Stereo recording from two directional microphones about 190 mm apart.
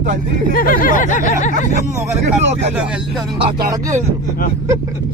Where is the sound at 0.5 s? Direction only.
50° left (ahead or behind).